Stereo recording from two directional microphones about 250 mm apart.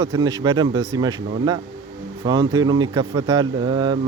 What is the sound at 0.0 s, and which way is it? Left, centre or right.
Speech, centre.